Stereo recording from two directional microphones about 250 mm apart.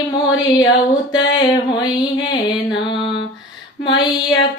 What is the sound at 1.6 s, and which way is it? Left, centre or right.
Female singing, centre.